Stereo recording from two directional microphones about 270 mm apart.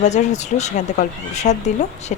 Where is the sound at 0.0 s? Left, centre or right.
Left.